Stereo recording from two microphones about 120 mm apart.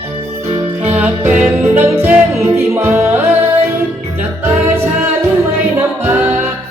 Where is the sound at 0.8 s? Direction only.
15° right (ahead or behind).